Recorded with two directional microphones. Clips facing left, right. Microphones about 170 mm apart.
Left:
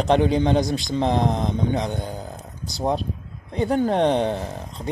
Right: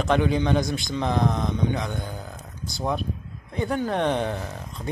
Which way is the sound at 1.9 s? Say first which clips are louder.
Left 3 dB; 20° left (ahead or behind).